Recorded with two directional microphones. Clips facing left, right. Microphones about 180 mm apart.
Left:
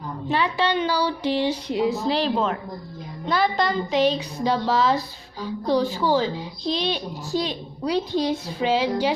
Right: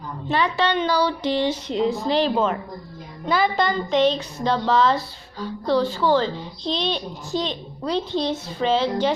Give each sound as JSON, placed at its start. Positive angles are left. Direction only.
{"t": 0.3, "sound": "a woman's voice", "side_deg": 10}